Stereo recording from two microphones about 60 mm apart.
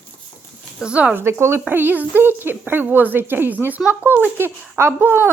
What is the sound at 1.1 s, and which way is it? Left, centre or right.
Speech, right.